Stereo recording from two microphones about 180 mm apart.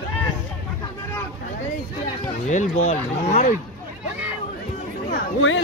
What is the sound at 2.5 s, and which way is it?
Speech, 40° left (ahead or behind).